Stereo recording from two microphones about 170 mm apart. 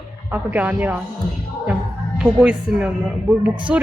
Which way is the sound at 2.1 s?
5° right (ahead or behind).